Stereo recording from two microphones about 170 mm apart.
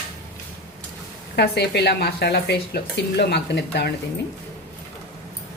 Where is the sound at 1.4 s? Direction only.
75° left (ahead or behind).